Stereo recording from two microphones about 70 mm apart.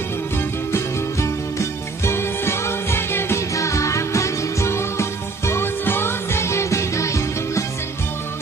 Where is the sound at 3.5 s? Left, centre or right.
Left.